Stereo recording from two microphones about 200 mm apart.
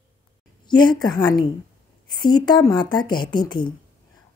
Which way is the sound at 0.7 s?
20° left (ahead or behind).